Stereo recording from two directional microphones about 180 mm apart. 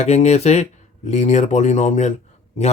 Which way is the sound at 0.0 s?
35° left (ahead or behind).